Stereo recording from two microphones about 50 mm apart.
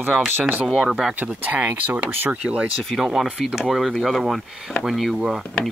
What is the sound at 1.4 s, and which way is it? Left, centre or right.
Speech, right.